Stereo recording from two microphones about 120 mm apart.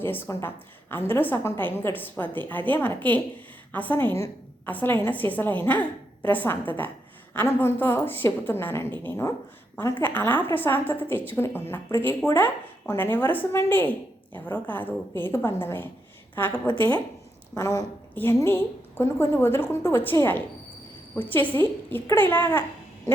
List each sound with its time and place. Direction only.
0.0 s a woman's voice: 15° left (ahead or behind)